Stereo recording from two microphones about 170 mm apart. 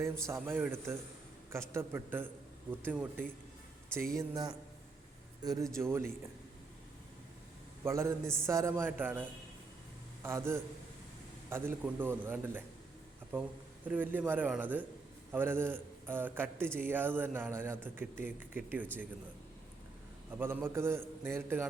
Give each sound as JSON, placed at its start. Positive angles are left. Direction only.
{"t": 0.0, "sound": "a man's voice", "side_deg": -15}
{"t": 4.2, "sound": "a man's voice", "side_deg": -20}
{"t": 7.9, "sound": "a man's voice", "side_deg": -15}
{"t": 10.2, "sound": "a man's voice", "side_deg": -15}
{"t": 13.8, "sound": "a man's voice", "side_deg": -10}
{"t": 20.3, "sound": "a man's voice", "side_deg": -10}